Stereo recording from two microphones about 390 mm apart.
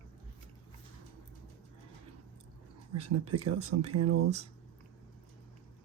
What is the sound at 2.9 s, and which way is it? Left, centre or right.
Speech, right.